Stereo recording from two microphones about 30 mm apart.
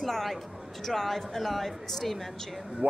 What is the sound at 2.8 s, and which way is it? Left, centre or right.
Speech, right.